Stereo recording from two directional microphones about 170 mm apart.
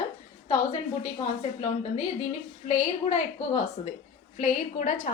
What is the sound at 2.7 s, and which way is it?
Speech, 35° left (ahead or behind).